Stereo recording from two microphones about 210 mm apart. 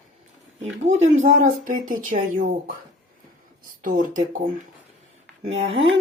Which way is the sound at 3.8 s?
40° right (ahead or behind).